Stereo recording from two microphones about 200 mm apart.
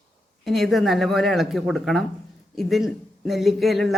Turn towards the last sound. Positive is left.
turn(degrees=0)  # may be behind; listen again after turning